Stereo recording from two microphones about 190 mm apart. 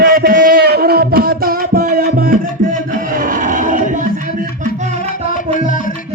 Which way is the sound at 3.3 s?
45° right (ahead or behind).